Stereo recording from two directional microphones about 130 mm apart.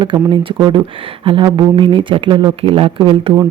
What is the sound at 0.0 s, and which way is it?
Speech, 40° right (ahead or behind).